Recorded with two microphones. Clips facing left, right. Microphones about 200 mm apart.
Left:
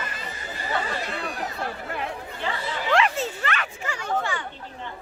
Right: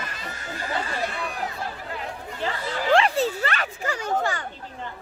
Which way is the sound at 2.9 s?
35° right (ahead or behind).